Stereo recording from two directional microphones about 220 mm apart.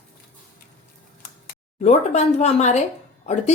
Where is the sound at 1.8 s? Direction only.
30° left (ahead or behind).